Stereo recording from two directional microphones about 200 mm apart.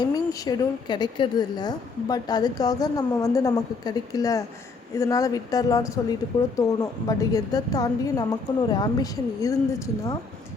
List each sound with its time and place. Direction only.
0.0 s a woman's voice: 20° left (ahead or behind)